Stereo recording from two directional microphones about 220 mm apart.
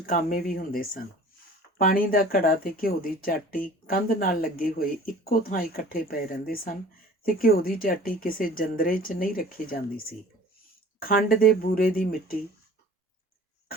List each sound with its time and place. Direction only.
0.0 s speech: 40° left (ahead or behind)